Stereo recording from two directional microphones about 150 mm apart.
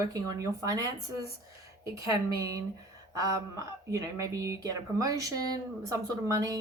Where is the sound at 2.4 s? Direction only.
20° right (ahead or behind).